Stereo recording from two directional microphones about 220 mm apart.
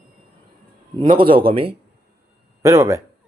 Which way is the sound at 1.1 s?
25° right (ahead or behind).